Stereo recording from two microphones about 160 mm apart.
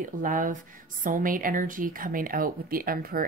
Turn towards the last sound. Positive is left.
turn(degrees=-65)  # may be behind; listen again after turning